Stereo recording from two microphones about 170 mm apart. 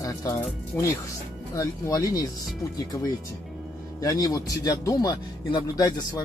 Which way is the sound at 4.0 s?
20° left (ahead or behind).